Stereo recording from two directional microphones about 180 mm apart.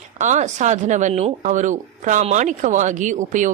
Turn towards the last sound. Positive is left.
turn(degrees=-45)  # may be behind; listen again after turning